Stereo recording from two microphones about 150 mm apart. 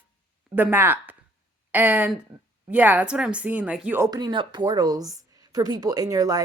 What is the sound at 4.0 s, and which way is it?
A woman's voice, 25° right (ahead or behind).